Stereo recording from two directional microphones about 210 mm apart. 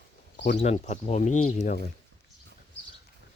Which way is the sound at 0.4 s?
35° left (ahead or behind).